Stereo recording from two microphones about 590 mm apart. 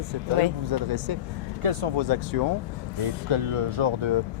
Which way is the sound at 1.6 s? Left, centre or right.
Right.